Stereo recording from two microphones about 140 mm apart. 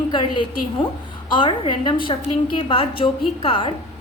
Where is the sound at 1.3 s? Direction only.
40° left (ahead or behind).